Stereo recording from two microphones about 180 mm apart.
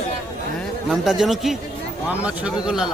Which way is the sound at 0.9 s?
Centre (ahead or behind).